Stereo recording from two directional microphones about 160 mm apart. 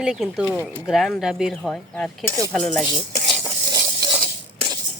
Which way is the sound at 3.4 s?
20° right (ahead or behind).